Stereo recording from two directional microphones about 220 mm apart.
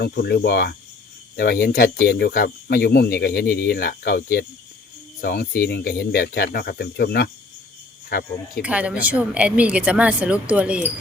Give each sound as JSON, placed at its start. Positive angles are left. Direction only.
{"t": 0.0, "sound": "speech", "side_deg": 45}
{"t": 8.6, "sound": "speech", "side_deg": -5}